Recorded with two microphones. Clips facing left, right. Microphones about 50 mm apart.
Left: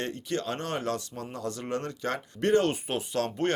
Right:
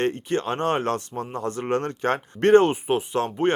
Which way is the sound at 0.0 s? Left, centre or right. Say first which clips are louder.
Right 7 dB; right.